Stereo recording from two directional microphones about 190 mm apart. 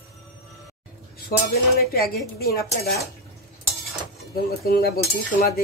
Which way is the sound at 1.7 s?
55° left (ahead or behind).